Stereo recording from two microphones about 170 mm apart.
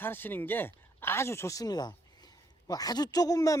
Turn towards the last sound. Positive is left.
turn(degrees=20)  # may be behind; listen again after turning